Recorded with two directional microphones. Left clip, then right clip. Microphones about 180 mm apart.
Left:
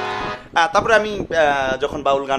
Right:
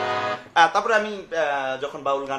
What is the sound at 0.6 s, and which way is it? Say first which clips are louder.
A man's voice: left 3 dB; 50° left (ahead or behind).